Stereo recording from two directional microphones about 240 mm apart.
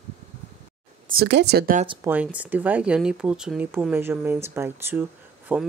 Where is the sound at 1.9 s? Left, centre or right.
Centre.